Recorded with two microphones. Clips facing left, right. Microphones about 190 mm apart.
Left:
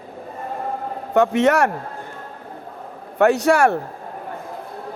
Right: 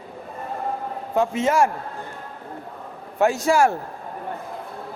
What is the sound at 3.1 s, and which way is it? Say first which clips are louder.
Speech: left 3 dB; 65° left (ahead or behind).